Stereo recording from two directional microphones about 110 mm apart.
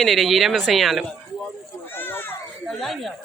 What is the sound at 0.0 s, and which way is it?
Speech, centre (ahead or behind).